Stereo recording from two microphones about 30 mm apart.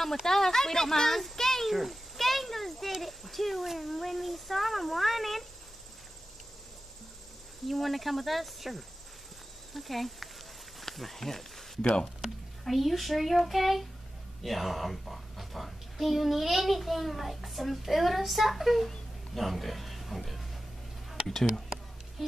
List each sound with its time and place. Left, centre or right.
0.0 s speech: centre
1.7 s a sound: centre
3.0 s cricket: centre
3.6 s a woman's voice: centre
7.6 s a woman's voice: centre
12.6 s a woman's voice: centre
21.3 s speech: centre